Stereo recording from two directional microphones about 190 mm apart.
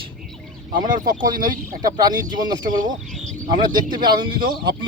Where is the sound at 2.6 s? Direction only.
45° right (ahead or behind).